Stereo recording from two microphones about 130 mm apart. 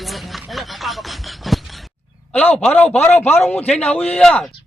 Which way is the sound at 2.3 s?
10° left (ahead or behind).